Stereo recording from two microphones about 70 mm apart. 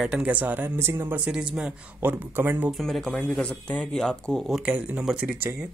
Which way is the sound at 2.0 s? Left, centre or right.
Right.